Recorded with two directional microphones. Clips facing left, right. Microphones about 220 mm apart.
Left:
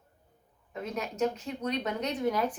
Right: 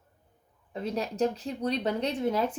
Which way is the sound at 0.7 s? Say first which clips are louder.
Right 4 dB; 30° right (ahead or behind).